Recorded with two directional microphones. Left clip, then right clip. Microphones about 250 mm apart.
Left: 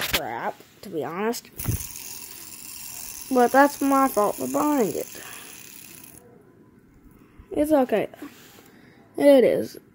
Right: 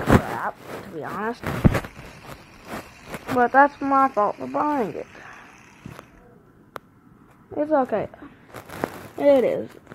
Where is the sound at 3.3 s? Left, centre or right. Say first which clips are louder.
Right 1 dB; left.